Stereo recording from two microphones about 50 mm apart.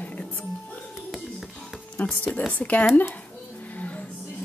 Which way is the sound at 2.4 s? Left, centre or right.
Left.